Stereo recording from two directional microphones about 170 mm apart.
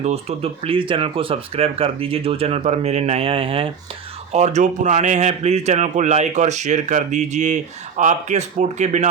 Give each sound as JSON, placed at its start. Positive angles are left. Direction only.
{"t": 0.0, "sound": "a man's voice", "side_deg": -40}